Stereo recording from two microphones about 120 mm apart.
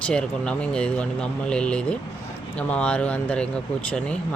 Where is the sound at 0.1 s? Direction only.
5° left (ahead or behind).